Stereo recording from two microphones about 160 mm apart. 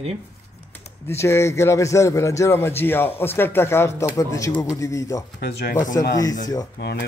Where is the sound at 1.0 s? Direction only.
15° left (ahead or behind).